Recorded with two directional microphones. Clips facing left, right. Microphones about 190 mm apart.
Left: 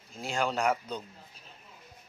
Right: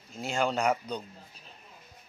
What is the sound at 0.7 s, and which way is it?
Speech, 15° right (ahead or behind).